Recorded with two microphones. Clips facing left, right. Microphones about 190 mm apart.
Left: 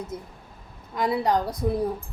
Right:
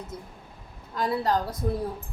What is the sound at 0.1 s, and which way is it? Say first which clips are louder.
Speech: left 4 dB; 20° left (ahead or behind).